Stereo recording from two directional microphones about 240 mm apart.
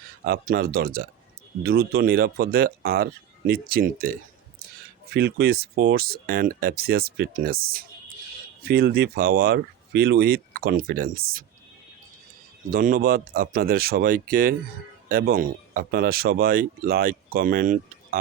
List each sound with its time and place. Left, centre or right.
0.3 s speech: right
12.7 s speech: right